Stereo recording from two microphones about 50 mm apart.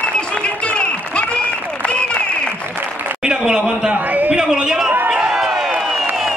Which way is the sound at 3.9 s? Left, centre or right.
Right.